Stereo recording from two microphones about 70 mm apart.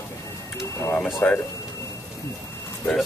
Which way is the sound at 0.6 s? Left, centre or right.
Left.